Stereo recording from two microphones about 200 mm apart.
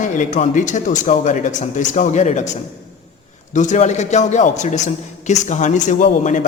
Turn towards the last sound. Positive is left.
turn(degrees=40)  # may be behind; listen again after turning